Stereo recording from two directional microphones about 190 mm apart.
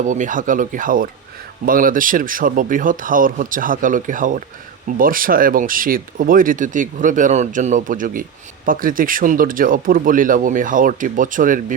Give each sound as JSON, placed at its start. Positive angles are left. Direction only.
{"t": 0.0, "sound": "speech", "side_deg": -40}